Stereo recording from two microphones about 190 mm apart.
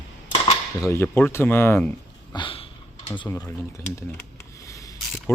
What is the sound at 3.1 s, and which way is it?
Speech, 20° left (ahead or behind).